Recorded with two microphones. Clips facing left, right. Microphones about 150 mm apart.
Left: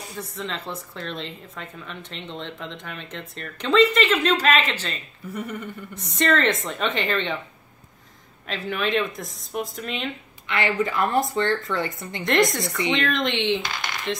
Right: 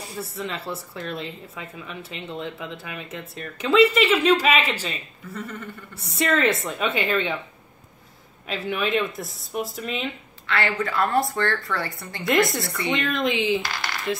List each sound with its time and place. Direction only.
0.0 s speech: 5° right (ahead or behind)
5.3 s a sound: 15° left (ahead or behind)
5.9 s speech: 5° right (ahead or behind)
8.5 s speech: 5° right (ahead or behind)
10.4 s speech: 20° left (ahead or behind)
12.2 s speech: 5° right (ahead or behind)
12.6 s speech: 20° left (ahead or behind)
12.9 s speech: centre (ahead or behind)